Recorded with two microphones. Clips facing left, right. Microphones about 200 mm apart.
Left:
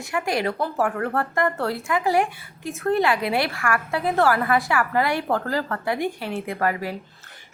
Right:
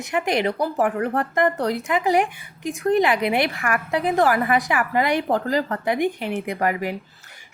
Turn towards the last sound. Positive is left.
turn(degrees=-15)  # may be behind; listen again after turning